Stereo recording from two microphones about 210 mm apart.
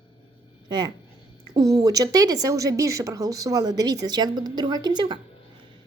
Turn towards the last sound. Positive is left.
turn(degrees=-20)  # may be behind; listen again after turning